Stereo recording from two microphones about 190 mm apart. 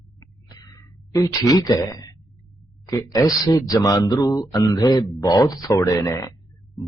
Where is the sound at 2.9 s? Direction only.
20° left (ahead or behind).